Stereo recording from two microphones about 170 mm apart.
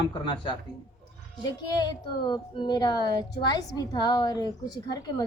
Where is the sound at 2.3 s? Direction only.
25° left (ahead or behind).